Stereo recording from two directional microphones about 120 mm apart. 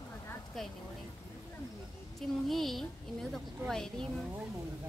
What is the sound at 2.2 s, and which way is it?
Speech, centre (ahead or behind).